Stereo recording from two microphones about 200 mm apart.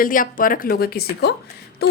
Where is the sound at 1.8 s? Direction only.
55° left (ahead or behind).